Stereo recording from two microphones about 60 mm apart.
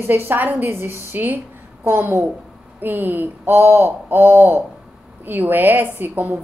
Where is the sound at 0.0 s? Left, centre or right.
Right.